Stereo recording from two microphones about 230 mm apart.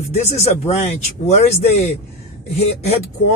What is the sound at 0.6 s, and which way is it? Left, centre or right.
Speech, left.